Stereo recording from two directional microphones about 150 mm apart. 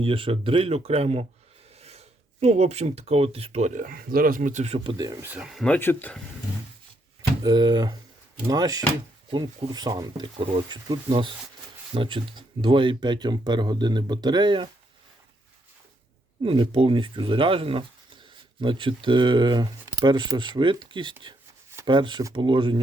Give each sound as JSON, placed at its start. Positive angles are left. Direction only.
{"t": 0.0, "sound": "speech", "side_deg": -40}
{"t": 5.2, "sound": "speech", "side_deg": -10}
{"t": 7.2, "sound": "speech", "side_deg": -25}
{"t": 16.4, "sound": "speech", "side_deg": -35}